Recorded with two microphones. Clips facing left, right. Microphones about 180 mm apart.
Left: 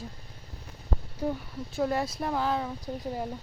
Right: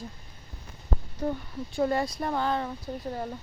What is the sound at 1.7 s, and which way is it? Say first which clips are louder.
Speech: right 2 dB; centre (ahead or behind).